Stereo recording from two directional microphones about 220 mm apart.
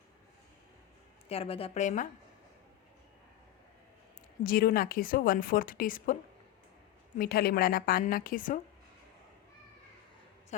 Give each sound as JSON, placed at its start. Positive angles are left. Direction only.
{"t": 1.3, "sound": "a woman's voice", "side_deg": 25}
{"t": 4.4, "sound": "a woman's voice", "side_deg": 45}
{"t": 7.2, "sound": "a woman's voice", "side_deg": 45}